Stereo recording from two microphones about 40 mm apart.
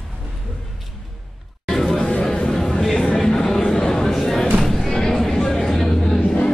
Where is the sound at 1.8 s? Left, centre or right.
Centre.